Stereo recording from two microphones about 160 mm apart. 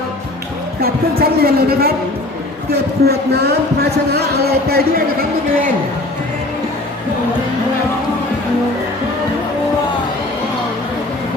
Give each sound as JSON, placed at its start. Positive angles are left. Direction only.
{"t": 0.8, "sound": "speech", "side_deg": -70}
{"t": 2.7, "sound": "speech", "side_deg": -90}